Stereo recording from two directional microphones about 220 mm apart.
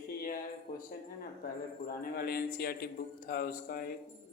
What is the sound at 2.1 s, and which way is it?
A man's voice, 45° left (ahead or behind).